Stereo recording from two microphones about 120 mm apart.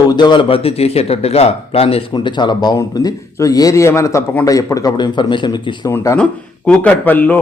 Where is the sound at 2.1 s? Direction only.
40° left (ahead or behind).